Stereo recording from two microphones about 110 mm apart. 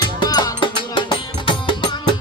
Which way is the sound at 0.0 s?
40° left (ahead or behind).